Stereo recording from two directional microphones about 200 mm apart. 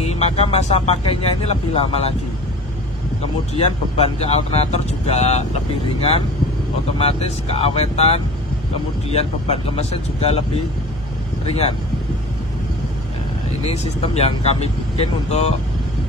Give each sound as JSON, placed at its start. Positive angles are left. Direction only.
{"t": 0.0, "sound": "speech", "side_deg": 30}
{"t": 3.9, "sound": "speech", "side_deg": 30}
{"t": 7.0, "sound": "speech", "side_deg": 30}
{"t": 11.4, "sound": "speech", "side_deg": 30}
{"t": 13.7, "sound": "speech", "side_deg": 30}